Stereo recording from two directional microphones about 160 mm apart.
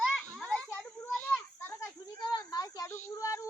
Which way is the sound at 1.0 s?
15° left (ahead or behind).